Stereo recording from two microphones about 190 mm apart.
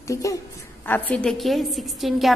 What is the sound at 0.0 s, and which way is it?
A woman's voice, 15° left (ahead or behind).